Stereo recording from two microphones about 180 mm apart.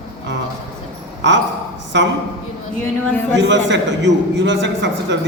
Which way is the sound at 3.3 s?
75° right (ahead or behind).